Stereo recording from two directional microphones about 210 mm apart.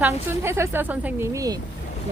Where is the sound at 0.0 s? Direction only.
10° right (ahead or behind).